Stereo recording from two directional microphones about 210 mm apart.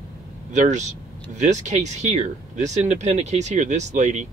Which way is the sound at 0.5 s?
35° right (ahead or behind).